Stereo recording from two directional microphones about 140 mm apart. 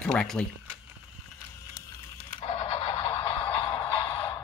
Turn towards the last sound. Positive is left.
turn(degrees=40)  # may be behind; listen again after turning